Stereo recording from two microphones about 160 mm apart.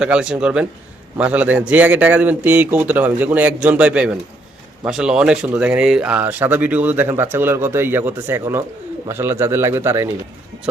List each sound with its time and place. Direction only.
0.0 s speech: 5° right (ahead or behind)